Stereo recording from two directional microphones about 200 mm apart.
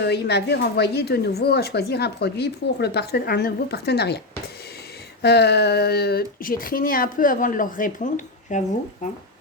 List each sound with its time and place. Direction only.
0.0 s a woman's voice: 55° left (ahead or behind)
5.2 s speech: 55° left (ahead or behind); by 9.0 s 40° left (ahead or behind)